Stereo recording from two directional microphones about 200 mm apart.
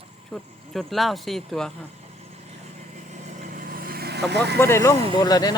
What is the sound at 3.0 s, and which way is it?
Vehicle, 35° right (ahead or behind).